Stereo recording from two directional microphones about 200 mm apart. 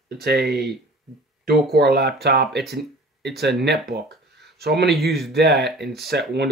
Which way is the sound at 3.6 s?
55° right (ahead or behind).